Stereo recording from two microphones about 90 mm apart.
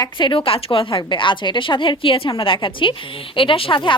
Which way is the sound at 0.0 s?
65° left (ahead or behind).